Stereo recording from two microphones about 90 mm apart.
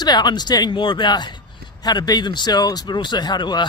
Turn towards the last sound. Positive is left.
turn(degrees=55)  # may be behind; listen again after turning